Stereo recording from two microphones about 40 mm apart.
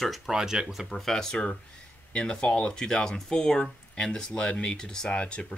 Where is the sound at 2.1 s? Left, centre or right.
Left.